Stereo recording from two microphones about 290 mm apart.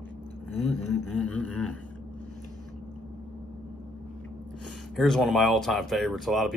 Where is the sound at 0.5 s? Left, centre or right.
Centre.